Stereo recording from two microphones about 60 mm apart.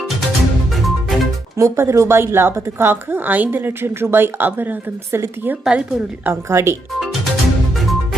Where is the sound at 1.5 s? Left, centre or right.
Right.